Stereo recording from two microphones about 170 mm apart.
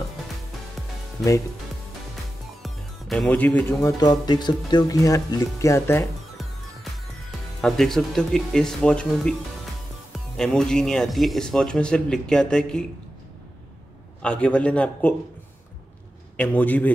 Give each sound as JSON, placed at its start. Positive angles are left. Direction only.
{"t": 2.6, "sound": "speech", "side_deg": 0}
{"t": 4.0, "sound": "speech", "side_deg": 25}
{"t": 7.6, "sound": "speech", "side_deg": 0}
{"t": 14.2, "sound": "a man's voice", "side_deg": 5}
{"t": 16.3, "sound": "a man's voice", "side_deg": 10}